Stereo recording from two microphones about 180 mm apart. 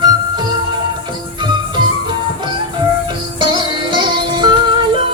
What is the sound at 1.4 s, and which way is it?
Music, 25° right (ahead or behind).